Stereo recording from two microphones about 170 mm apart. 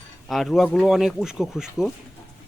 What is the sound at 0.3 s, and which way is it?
Speech, centre (ahead or behind).